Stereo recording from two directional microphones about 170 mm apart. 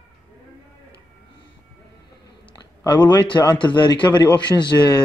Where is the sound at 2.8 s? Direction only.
15° left (ahead or behind).